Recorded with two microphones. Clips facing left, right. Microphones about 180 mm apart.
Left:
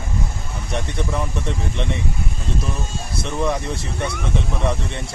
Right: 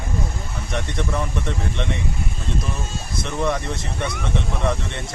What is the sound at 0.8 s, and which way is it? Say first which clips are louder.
Speech: even; centre (ahead or behind).